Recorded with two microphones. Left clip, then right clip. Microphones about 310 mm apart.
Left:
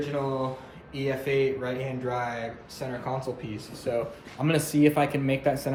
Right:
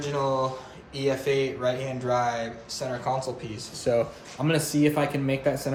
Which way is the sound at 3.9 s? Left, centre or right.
Right.